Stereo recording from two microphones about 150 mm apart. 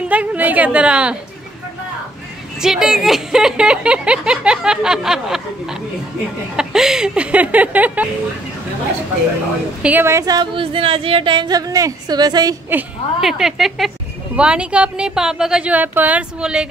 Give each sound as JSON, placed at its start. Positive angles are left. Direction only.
{"t": 0.1, "sound": "speech", "side_deg": -10}
{"t": 2.6, "sound": "a woman's voice", "side_deg": -5}
{"t": 9.8, "sound": "speech", "side_deg": -15}
{"t": 13.2, "sound": "a woman's voice", "side_deg": 0}